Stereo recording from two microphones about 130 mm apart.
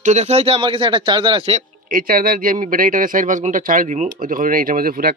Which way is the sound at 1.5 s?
90° right.